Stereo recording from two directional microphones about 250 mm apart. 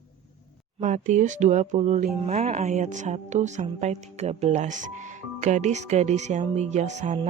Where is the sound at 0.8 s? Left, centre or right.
Right.